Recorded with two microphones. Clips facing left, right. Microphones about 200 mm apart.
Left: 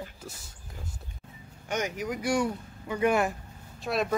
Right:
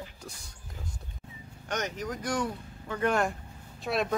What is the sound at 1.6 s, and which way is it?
Speech, 10° left (ahead or behind).